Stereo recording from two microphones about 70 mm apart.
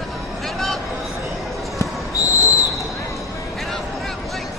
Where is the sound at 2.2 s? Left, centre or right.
Left.